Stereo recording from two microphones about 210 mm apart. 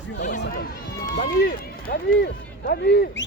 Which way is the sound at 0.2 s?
35° left (ahead or behind).